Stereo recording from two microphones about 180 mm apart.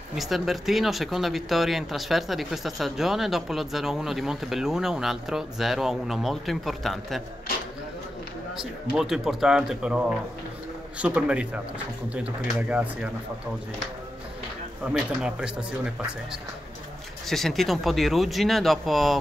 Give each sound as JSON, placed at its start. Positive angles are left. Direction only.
{"t": 0.1, "sound": "speech", "side_deg": 0}
{"t": 8.9, "sound": "speech", "side_deg": -5}
{"t": 15.0, "sound": "speech", "side_deg": -5}
{"t": 17.3, "sound": "speech", "side_deg": 0}